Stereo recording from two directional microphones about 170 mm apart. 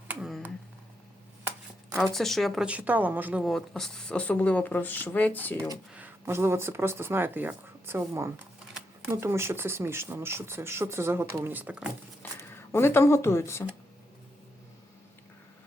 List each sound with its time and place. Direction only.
0.1 s a sound: centre (ahead or behind)
2.1 s speech: centre (ahead or behind)
5.9 s speech: 10° right (ahead or behind)
12.2 s speech: 15° left (ahead or behind)